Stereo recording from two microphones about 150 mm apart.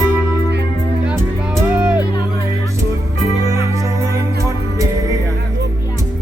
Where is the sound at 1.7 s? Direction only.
10° right (ahead or behind).